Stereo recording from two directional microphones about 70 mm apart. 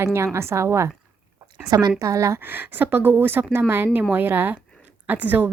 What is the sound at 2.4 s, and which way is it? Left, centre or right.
A woman's voice, right.